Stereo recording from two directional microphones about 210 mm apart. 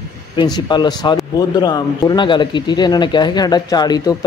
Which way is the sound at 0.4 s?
20° left (ahead or behind).